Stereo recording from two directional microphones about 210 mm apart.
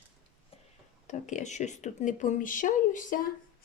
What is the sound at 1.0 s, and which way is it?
A woman's voice, 35° left (ahead or behind).